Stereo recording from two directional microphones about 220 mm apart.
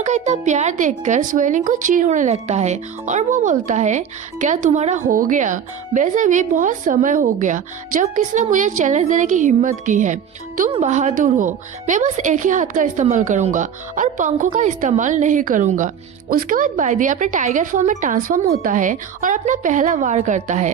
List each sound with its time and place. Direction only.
0.0 s a woman's voice: 30° right (ahead or behind)